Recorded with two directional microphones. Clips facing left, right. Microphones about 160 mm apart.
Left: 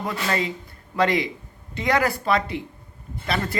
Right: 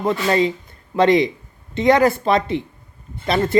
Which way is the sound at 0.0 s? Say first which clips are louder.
Right 8 dB; 25° right (ahead or behind).